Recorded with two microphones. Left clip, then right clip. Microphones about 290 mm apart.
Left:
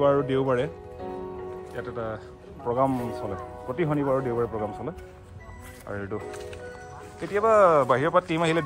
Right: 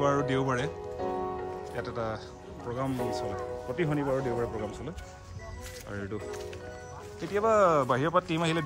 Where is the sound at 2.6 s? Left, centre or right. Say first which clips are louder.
Left 8 dB; centre.